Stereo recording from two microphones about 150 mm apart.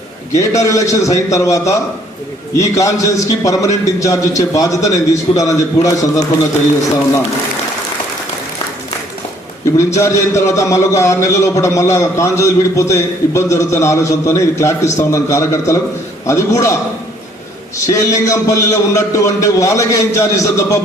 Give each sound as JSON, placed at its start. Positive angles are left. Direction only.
{"t": 0.3, "sound": "a man's voice", "side_deg": 20}
{"t": 9.7, "sound": "a man's voice", "side_deg": 20}
{"t": 17.8, "sound": "a man's voice", "side_deg": 20}